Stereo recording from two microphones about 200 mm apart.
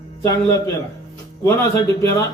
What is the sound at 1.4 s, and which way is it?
Speech, 15° left (ahead or behind).